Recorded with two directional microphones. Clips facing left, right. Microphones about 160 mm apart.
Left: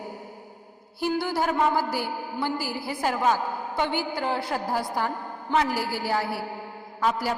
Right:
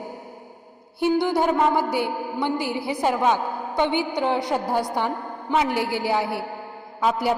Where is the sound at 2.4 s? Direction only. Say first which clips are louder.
Right 4 dB; centre (ahead or behind).